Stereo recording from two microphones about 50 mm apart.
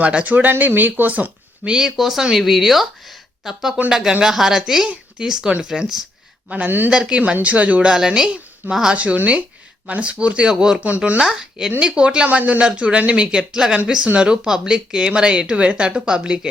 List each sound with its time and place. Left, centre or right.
0.0 s speech: right
1.6 s speech: centre
6.7 s speech: right
6.9 s speech: centre
7.4 s speech: right
7.9 s speech: centre
8.9 s speech: right
10.8 s speech: right
11.2 s speech: centre